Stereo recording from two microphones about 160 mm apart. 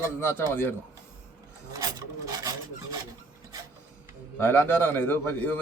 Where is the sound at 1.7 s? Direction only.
25° right (ahead or behind).